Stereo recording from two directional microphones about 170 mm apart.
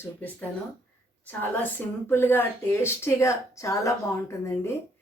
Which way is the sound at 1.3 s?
10° left (ahead or behind).